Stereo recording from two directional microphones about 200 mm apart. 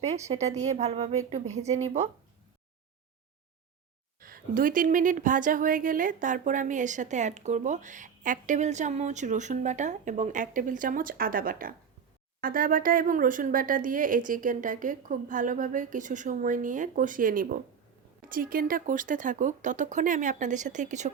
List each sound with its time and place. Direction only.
0.3 s a woman's voice: 35° right (ahead or behind)
4.2 s a woman's voice: 45° right (ahead or behind)